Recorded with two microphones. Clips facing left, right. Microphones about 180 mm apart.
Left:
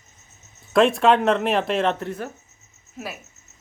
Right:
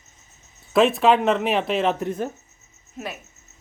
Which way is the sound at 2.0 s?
20° right (ahead or behind).